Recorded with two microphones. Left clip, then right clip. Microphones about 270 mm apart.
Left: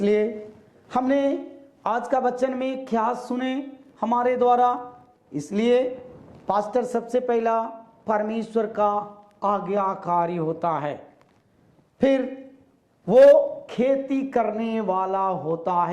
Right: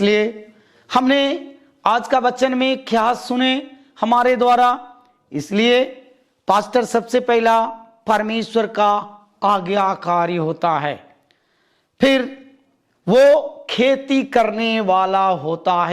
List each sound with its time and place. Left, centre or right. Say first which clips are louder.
0.0 s a man's voice: right 5 dB; right
11.9 s a man's voice: right 5 dB; right
13.7 s speech: right 6 dB; right